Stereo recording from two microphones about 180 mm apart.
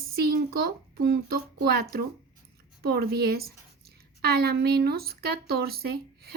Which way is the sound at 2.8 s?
60° right (ahead or behind).